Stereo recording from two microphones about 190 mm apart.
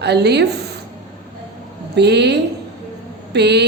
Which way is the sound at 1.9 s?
60° right (ahead or behind).